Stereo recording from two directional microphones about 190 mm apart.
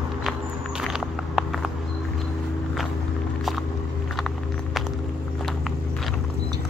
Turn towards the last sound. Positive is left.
turn(degrees=0)  # may be behind; listen again after turning